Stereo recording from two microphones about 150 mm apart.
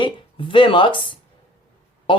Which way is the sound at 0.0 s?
35° left (ahead or behind).